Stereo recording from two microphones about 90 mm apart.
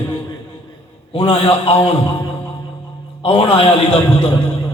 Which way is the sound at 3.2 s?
85° left.